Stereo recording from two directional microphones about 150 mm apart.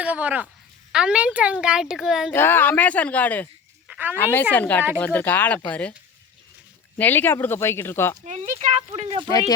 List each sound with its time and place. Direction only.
0.0 s a woman's voice: 10° right (ahead or behind)
2.3 s speech: 15° left (ahead or behind)
3.8 s a sound: 10° right (ahead or behind)
4.2 s speech: 15° left (ahead or behind)
6.9 s speech: 15° left (ahead or behind)
8.2 s speech: 50° right (ahead or behind)
9.0 s speech: 40° right (ahead or behind)